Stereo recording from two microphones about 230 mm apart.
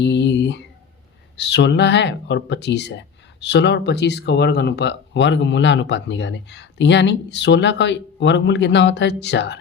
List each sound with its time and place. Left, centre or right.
0.0 s speech: left